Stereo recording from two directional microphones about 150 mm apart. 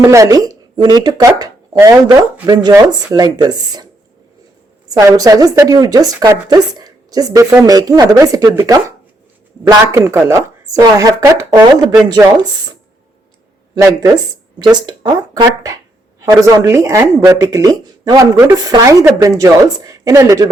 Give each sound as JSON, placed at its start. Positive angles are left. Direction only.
{"t": 0.0, "sound": "speech", "side_deg": -20}
{"t": 4.9, "sound": "speech", "side_deg": -25}
{"t": 14.6, "sound": "speech", "side_deg": -30}